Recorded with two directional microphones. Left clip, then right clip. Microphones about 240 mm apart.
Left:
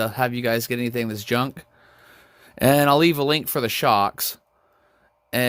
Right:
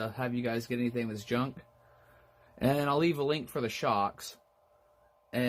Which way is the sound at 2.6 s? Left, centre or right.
Left.